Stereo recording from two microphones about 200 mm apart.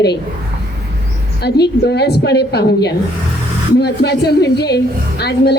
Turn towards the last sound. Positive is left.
turn(degrees=55)  # may be behind; listen again after turning